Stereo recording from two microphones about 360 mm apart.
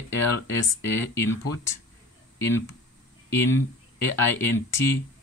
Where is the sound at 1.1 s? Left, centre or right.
Centre.